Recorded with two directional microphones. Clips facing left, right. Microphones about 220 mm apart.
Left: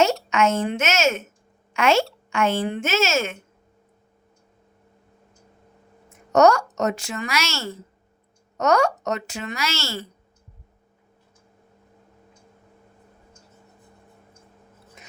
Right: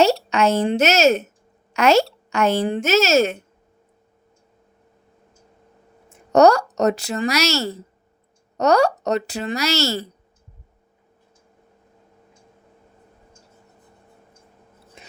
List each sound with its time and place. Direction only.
0.0 s a woman's voice: 35° right (ahead or behind)
6.1 s a woman's voice: 35° right (ahead or behind)
15.0 s stir: 30° right (ahead or behind)